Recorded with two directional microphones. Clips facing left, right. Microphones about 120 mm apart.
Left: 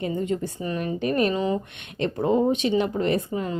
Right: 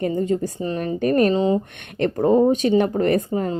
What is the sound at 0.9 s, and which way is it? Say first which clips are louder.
A woman's voice: right 6 dB; 45° right (ahead or behind).